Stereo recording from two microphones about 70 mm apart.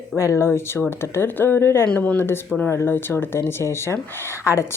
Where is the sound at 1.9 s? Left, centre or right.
Centre.